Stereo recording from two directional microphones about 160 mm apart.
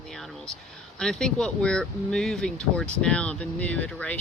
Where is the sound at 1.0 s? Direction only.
5° left (ahead or behind).